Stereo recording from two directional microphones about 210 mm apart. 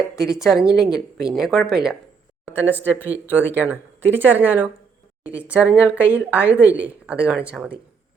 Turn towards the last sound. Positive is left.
turn(degrees=-5)  # may be behind; listen again after turning